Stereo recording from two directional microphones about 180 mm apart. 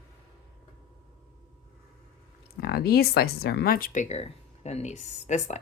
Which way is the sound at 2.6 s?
55° left (ahead or behind).